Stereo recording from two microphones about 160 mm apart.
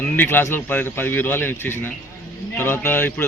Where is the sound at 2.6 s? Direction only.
15° left (ahead or behind).